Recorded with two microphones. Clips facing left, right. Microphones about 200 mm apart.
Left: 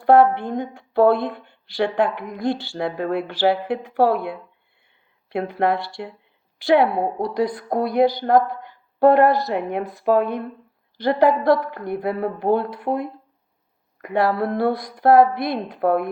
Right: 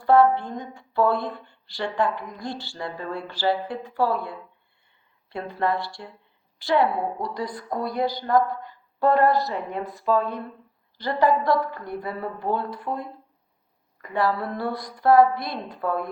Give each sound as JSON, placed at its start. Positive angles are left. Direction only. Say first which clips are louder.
{"t": 0.0, "sound": "a woman's voice", "louder": "left 3 dB", "side_deg": 65}